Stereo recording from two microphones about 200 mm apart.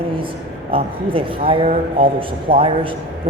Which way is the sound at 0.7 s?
25° right (ahead or behind).